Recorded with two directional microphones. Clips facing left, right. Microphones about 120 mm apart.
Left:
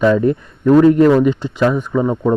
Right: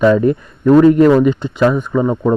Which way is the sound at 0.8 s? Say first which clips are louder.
Right 1 dB; 5° right (ahead or behind).